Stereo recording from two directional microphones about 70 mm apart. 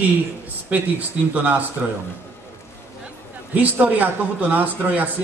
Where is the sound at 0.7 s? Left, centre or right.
Centre.